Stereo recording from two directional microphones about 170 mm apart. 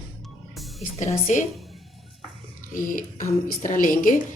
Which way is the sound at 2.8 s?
50° left (ahead or behind).